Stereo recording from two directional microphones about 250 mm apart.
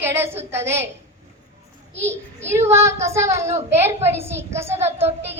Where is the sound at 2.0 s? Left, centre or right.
Centre.